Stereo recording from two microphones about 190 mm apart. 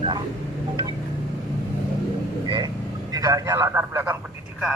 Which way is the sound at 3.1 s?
15° right (ahead or behind).